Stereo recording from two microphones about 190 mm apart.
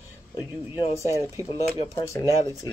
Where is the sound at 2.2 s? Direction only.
20° left (ahead or behind).